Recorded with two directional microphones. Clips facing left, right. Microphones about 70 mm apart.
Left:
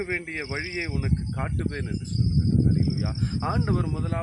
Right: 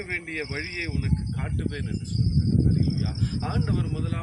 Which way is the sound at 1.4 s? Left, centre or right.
Left.